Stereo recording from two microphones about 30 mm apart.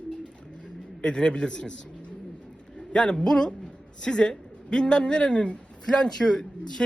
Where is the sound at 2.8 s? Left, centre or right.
Left.